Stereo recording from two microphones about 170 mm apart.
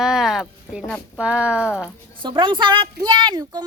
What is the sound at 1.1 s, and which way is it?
Speech, 5° right (ahead or behind).